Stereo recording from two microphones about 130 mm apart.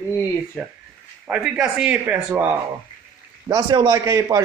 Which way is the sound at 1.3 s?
5° right (ahead or behind).